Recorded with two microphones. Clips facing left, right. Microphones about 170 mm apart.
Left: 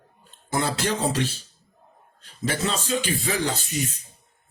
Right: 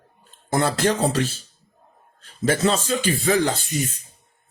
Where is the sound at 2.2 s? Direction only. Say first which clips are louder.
Right 6 dB; 40° right (ahead or behind).